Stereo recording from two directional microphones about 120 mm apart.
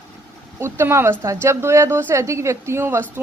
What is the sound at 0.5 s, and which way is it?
A woman's voice, 20° right (ahead or behind).